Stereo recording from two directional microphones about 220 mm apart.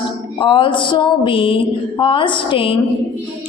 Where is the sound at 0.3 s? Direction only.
25° left (ahead or behind).